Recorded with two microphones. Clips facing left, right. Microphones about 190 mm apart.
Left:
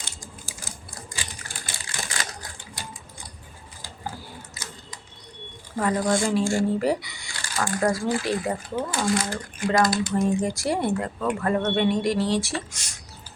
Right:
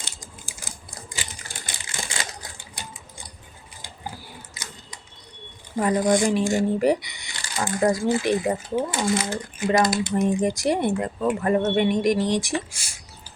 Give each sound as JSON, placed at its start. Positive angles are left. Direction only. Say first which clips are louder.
{"t": 1.1, "sound": "typewriter", "louder": "right 2 dB", "side_deg": -25}
{"t": 4.5, "sound": "a sound", "louder": "left 1 dB", "side_deg": -20}
{"t": 5.7, "sound": "speech", "louder": "right 3 dB", "side_deg": -20}